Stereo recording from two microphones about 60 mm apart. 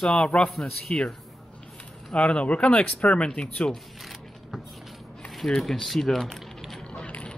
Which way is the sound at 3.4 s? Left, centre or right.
Centre.